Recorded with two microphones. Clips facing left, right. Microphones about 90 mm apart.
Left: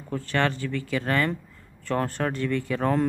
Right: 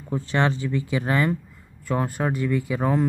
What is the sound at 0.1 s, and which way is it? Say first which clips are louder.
Speech: right 2 dB; 20° right (ahead or behind).